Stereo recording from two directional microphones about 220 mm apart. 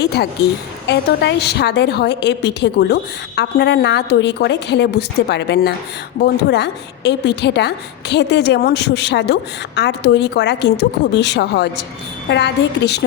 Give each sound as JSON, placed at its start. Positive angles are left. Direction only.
{"t": 0.0, "sound": "a woman's voice", "side_deg": 45}